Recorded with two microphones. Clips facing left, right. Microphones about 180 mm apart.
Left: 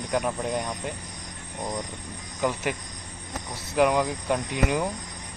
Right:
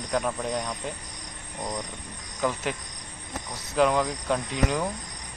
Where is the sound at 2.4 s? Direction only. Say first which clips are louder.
Left 1 dB; 10° left (ahead or behind).